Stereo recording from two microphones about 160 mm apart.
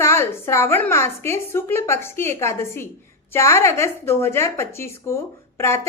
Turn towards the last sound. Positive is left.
turn(degrees=15)  # may be behind; listen again after turning